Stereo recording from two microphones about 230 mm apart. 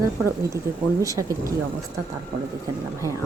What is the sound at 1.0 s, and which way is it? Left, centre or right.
Speech, centre.